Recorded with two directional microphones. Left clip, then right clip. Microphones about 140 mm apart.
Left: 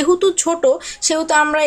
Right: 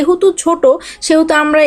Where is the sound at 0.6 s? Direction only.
25° right (ahead or behind).